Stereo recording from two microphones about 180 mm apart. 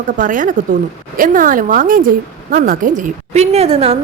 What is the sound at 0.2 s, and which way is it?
A woman's voice, 45° right (ahead or behind).